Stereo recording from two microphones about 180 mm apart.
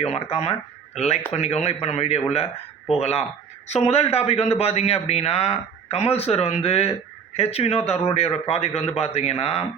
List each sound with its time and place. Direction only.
0.0 s speech: 35° left (ahead or behind)